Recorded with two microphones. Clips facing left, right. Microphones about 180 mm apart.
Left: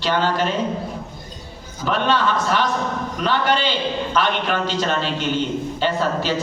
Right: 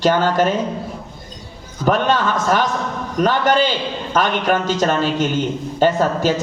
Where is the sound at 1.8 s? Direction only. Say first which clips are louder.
Right 3 dB; 45° right (ahead or behind).